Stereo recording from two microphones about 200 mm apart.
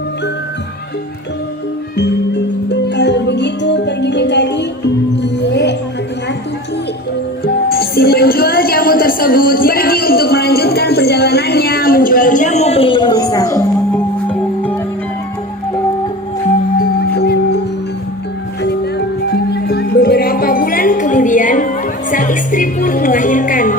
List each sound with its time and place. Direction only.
2.0 s music: 60° left (ahead or behind)
7.4 s music: 50° left (ahead or behind); by 14.8 s 10° left (ahead or behind)
16.7 s music: 50° left (ahead or behind)
18.6 s music: 55° left (ahead or behind); by 23.7 s 40° left (ahead or behind)